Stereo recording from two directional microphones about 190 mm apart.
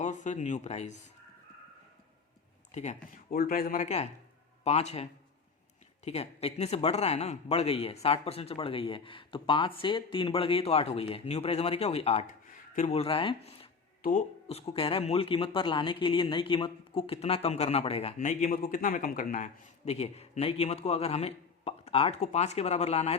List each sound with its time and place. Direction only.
0.0 s speech: 40° left (ahead or behind)
2.7 s speech: 35° left (ahead or behind)
3.3 s speech: 50° left (ahead or behind); by 5.0 s 35° left (ahead or behind)
6.1 s a man's voice: 35° left (ahead or behind)
12.9 s speech: 30° left (ahead or behind)
14.0 s speech: 40° left (ahead or behind)